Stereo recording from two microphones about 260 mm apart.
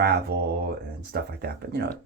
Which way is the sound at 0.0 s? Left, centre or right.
Right.